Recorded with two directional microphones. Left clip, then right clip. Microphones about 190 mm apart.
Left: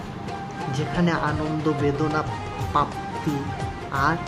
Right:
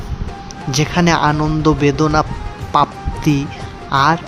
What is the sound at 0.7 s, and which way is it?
Speech, 40° right (ahead or behind).